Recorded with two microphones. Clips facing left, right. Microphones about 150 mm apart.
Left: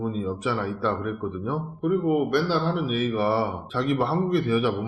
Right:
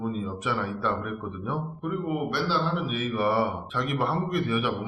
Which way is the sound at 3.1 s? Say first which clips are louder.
Right 3 dB; 30° left (ahead or behind).